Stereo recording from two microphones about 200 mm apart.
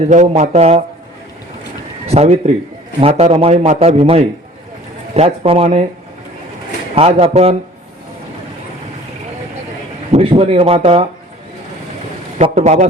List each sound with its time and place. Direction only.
0.1 s speech: 35° right (ahead or behind)
2.0 s speech: 30° right (ahead or behind)
6.9 s speech: 30° right (ahead or behind)
10.1 s speech: 30° right (ahead or behind)
12.4 s a man's voice: 35° right (ahead or behind)